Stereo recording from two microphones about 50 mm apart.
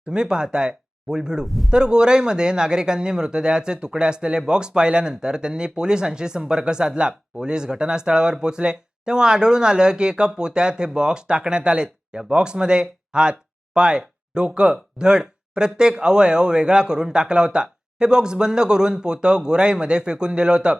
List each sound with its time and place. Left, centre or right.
0.1 s speech: centre
1.5 s a man's voice: centre
1.7 s speech: centre